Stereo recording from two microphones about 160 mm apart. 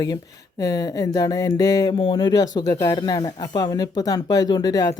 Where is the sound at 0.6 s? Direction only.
25° left (ahead or behind).